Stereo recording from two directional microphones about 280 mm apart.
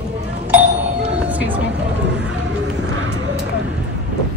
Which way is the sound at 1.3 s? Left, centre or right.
Centre.